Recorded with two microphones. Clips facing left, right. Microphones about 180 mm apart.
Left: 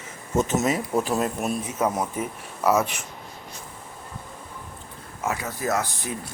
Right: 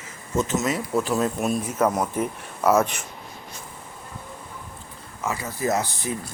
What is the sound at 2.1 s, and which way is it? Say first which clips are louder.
Speech: right 4 dB; centre (ahead or behind).